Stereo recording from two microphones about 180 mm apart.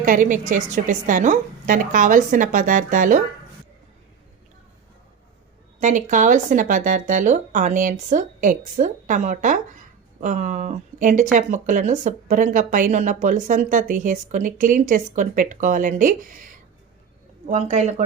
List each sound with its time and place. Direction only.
0.0 s speech: 45° right (ahead or behind)
5.8 s speech: 45° right (ahead or behind)
17.4 s speech: 35° right (ahead or behind)